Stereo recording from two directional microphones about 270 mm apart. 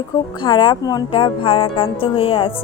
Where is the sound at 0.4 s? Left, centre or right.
Centre.